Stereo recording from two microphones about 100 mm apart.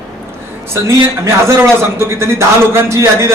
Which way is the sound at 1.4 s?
25° right (ahead or behind).